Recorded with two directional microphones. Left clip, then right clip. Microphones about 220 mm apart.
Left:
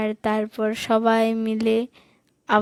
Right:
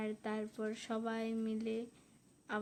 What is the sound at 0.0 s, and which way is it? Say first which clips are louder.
Speech: left 18 dB; 45° left (ahead or behind).